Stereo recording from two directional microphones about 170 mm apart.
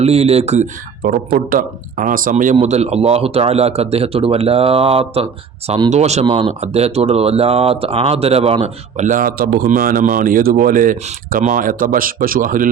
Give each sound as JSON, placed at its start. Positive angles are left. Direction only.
{"t": 0.0, "sound": "a man's voice", "side_deg": -35}
{"t": 1.0, "sound": "a man's voice", "side_deg": -60}